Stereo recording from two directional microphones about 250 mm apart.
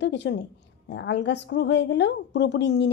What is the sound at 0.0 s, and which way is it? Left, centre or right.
A woman's voice, left.